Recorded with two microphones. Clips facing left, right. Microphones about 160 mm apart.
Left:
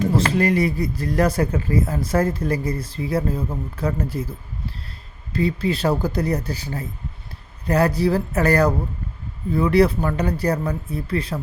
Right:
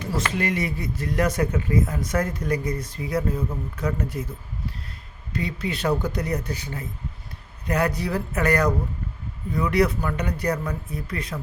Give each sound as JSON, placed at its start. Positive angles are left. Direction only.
{"t": 0.2, "sound": "speech", "side_deg": 35}
{"t": 5.3, "sound": "speech", "side_deg": 30}